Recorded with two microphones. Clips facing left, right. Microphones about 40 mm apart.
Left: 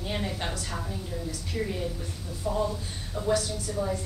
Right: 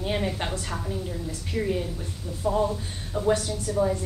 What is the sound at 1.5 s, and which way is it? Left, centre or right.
A woman's voice, centre.